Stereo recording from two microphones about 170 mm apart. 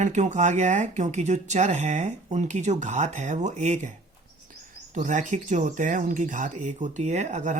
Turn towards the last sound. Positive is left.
turn(degrees=-45)  # may be behind; listen again after turning